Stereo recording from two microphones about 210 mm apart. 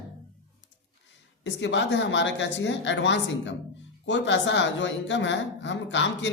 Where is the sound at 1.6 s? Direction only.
60° left (ahead or behind).